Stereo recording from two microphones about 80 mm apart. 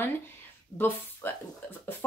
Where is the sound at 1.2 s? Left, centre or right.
Left.